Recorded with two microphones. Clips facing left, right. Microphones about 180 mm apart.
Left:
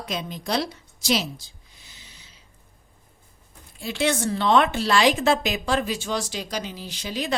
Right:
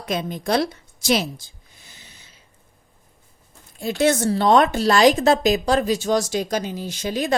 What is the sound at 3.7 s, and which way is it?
A woman's voice, 45° right (ahead or behind).